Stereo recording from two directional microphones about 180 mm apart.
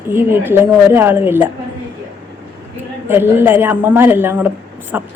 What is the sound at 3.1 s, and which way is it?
A woman's voice, 10° right (ahead or behind).